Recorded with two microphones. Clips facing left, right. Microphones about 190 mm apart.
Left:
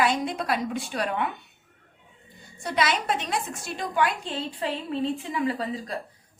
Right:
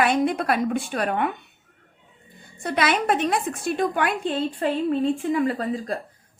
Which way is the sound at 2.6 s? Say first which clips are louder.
Right 3 dB; 55° right (ahead or behind).